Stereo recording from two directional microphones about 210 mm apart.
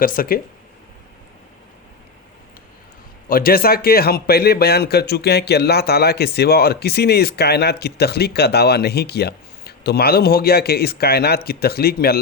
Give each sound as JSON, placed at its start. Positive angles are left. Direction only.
{"t": 0.0, "sound": "a man's voice", "side_deg": 45}
{"t": 3.2, "sound": "a man's voice", "side_deg": 45}